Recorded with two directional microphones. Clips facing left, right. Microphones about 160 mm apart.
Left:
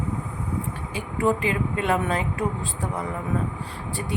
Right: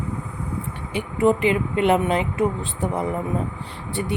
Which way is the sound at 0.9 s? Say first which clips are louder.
Right 5 dB; 25° right (ahead or behind).